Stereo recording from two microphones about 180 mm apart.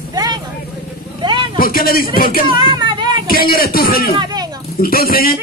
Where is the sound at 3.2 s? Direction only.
55° left (ahead or behind).